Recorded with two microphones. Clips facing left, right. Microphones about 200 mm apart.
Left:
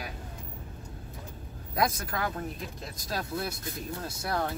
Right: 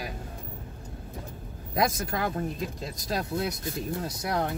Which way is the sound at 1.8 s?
25° right (ahead or behind).